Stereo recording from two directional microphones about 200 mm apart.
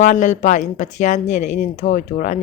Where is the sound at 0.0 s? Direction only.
35° left (ahead or behind).